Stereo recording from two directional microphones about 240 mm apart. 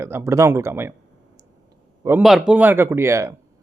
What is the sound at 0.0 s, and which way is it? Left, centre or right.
Speech, centre.